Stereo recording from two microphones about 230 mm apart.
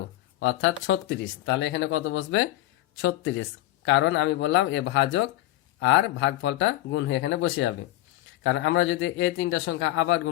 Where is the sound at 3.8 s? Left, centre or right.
Left.